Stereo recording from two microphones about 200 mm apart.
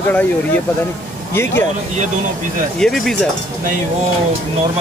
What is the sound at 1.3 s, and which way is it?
Speech, 10° left (ahead or behind).